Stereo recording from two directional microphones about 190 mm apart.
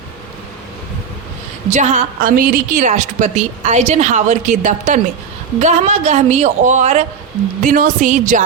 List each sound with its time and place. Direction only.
1.7 s a woman's voice: 40° right (ahead or behind)